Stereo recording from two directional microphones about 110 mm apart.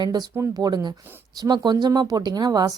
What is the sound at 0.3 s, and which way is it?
Speech, 25° right (ahead or behind).